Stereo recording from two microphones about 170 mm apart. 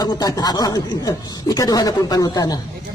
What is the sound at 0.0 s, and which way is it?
Speech, 20° left (ahead or behind).